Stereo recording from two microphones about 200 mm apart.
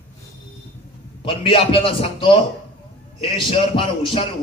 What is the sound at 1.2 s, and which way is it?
A man's voice, 25° left (ahead or behind).